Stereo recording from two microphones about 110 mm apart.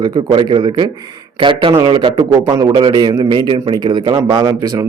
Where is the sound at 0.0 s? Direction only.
40° right (ahead or behind).